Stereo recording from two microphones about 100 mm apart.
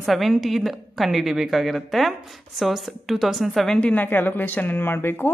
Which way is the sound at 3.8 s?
15° left (ahead or behind).